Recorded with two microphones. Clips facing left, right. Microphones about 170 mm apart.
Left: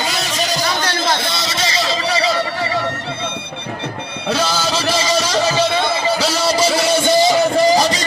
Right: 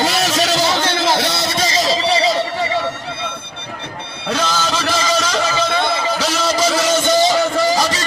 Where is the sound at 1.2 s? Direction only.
65° right (ahead or behind).